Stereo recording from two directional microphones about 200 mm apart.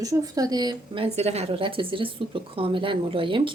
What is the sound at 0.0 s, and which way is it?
A woman's voice, 20° right (ahead or behind).